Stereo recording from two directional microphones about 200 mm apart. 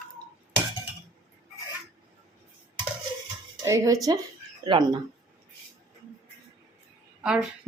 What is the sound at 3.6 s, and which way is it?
Speech, 15° right (ahead or behind).